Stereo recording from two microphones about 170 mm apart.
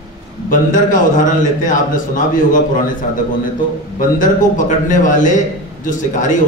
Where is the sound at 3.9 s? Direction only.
50° left (ahead or behind).